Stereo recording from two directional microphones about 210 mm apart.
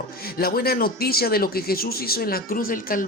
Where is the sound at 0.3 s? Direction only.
45° left (ahead or behind).